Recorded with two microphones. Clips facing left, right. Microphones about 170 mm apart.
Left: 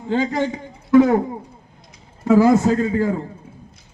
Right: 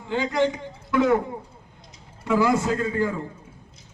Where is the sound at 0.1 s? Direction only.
40° left (ahead or behind).